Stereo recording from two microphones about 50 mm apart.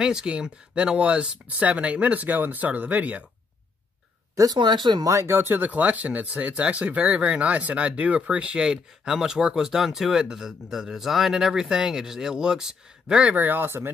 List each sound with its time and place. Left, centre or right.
0.0 s speech: centre
4.4 s speech: right
5.3 s speech: right
5.7 s speech: right; by 13.3 s centre
13.3 s speech: right
13.7 s speech: right